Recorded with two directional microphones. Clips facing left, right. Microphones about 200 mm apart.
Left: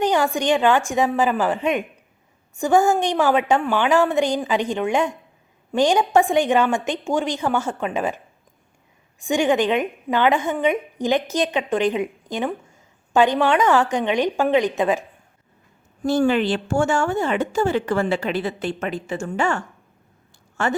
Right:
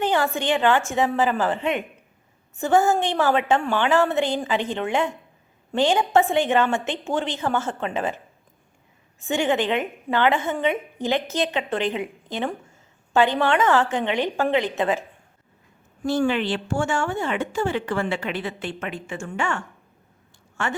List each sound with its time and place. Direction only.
0.0 s a woman's voice: 15° left (ahead or behind)
2.6 s a woman's voice: 15° left (ahead or behind)
9.2 s a woman's voice: 15° left (ahead or behind)
16.0 s speech: 45° left (ahead or behind)